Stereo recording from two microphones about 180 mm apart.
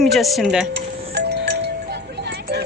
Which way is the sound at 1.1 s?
70° right (ahead or behind).